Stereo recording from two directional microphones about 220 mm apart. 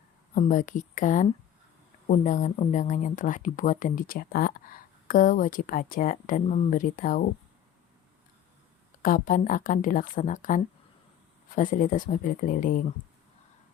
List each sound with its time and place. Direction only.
0.3 s speech: 35° left (ahead or behind)
9.0 s speech: 40° left (ahead or behind)